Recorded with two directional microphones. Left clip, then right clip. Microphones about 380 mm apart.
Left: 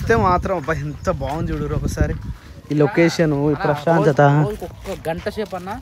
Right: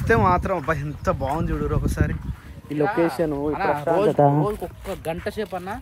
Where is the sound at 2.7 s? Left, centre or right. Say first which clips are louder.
Left 5 dB; right.